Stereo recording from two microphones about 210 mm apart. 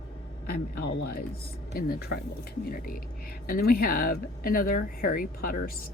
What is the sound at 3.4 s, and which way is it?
Speech, 45° left (ahead or behind).